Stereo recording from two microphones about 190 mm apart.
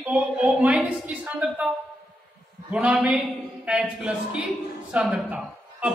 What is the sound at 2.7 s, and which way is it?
A man's voice, 5° right (ahead or behind).